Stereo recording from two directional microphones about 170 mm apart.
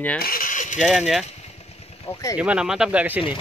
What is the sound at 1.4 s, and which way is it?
Vehicle, 35° left (ahead or behind).